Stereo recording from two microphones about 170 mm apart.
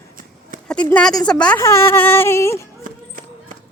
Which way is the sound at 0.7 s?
5° left (ahead or behind).